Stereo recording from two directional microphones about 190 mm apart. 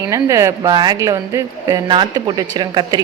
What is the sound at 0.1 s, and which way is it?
A woman's voice, 15° right (ahead or behind).